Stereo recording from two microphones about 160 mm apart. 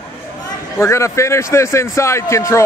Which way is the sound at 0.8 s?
15° left (ahead or behind).